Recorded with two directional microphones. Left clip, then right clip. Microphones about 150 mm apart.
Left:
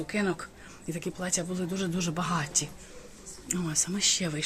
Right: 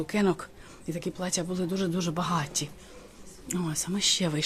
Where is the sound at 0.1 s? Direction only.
30° right (ahead or behind).